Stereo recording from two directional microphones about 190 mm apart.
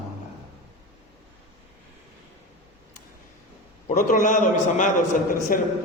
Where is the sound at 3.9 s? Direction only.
40° left (ahead or behind).